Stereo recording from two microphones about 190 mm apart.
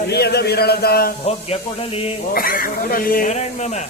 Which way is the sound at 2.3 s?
50° left (ahead or behind).